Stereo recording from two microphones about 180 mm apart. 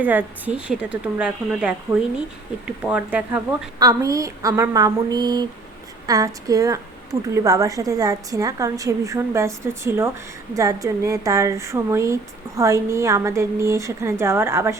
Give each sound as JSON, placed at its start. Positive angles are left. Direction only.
{"t": 0.0, "sound": "a woman's voice", "side_deg": -10}
{"t": 3.8, "sound": "a woman's voice", "side_deg": -20}